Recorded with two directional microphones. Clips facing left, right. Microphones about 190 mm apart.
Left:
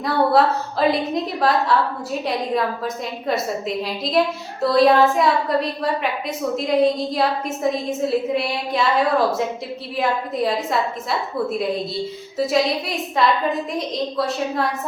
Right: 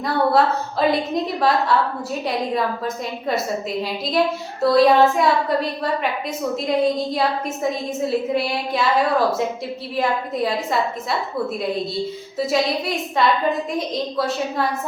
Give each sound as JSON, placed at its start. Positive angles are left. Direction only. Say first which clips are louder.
{"t": 0.0, "sound": "a woman's voice", "louder": "left 1 dB", "side_deg": 0}